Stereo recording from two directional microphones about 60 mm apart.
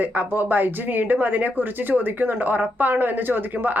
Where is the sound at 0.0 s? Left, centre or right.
Right.